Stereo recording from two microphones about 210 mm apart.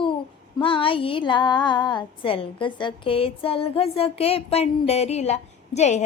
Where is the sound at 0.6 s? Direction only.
25° left (ahead or behind).